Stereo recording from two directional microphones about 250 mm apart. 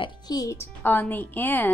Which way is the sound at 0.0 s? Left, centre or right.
Centre.